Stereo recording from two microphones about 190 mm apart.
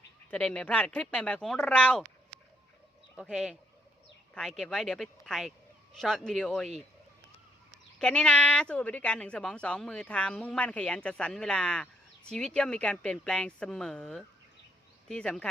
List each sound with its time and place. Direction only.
0.3 s speech: 5° left (ahead or behind)
3.2 s speech: 5° right (ahead or behind)
7.9 s speech: 5° left (ahead or behind)